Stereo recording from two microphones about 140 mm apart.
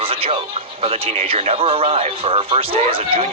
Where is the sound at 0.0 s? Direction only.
45° right (ahead or behind).